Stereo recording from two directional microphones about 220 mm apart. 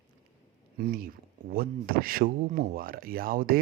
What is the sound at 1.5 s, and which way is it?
Speech, 40° right (ahead or behind).